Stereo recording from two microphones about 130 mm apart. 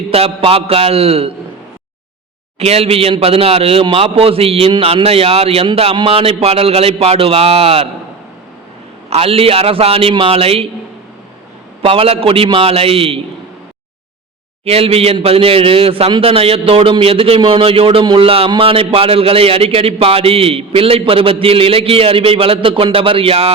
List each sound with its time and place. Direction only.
0.1 s a man's voice: 50° right (ahead or behind)
2.6 s a man's voice: 50° right (ahead or behind)
9.0 s a man's voice: 50° right (ahead or behind)
11.8 s a man's voice: 50° right (ahead or behind)
14.6 s a man's voice: 50° right (ahead or behind)